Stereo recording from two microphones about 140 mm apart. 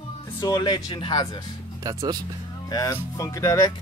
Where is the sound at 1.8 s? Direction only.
25° right (ahead or behind).